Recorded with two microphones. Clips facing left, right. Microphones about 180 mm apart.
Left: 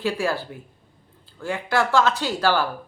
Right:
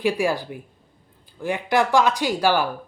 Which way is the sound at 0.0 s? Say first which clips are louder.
Right 3 dB; 15° right (ahead or behind).